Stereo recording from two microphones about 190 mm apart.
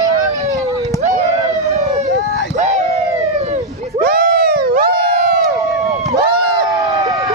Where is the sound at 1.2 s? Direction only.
70° left (ahead or behind).